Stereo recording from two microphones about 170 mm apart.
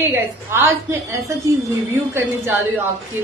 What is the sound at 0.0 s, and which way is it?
A woman's voice, 15° right (ahead or behind).